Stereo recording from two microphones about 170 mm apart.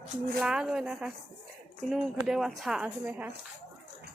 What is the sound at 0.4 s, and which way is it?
A woman's voice, 5° right (ahead or behind).